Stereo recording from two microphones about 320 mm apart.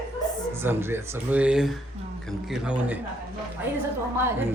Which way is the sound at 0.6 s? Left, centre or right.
Centre.